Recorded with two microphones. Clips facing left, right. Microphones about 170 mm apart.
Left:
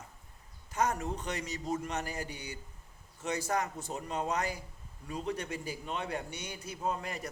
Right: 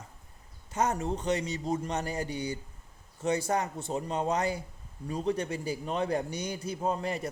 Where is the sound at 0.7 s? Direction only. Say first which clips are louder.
Right 3 dB; 30° right (ahead or behind).